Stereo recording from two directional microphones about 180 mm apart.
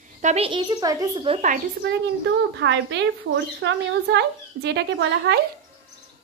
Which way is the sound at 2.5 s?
85° right.